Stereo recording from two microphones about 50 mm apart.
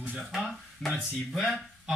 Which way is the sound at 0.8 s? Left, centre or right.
Centre.